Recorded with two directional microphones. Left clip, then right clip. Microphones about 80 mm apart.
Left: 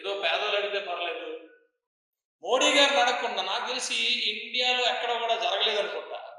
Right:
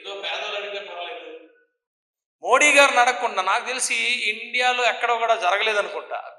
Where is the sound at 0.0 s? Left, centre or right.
Left.